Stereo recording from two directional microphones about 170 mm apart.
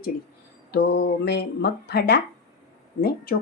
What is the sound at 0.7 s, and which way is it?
A woman's voice, 70° left (ahead or behind).